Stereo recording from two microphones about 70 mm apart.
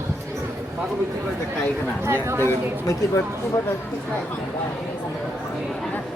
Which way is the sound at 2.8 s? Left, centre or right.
Left.